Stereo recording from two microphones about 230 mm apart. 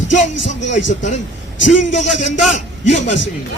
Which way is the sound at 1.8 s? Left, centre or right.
Left.